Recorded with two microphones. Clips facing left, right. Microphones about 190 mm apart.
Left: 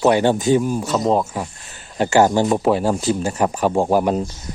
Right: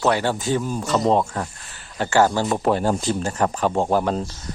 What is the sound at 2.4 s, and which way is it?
Speech, centre (ahead or behind).